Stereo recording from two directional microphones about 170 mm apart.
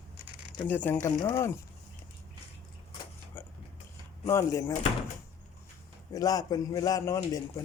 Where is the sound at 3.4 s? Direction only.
15° left (ahead or behind).